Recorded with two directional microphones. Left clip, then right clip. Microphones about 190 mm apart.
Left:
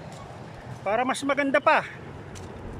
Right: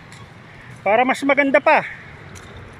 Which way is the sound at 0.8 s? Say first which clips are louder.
Right 9 dB; 5° right (ahead or behind).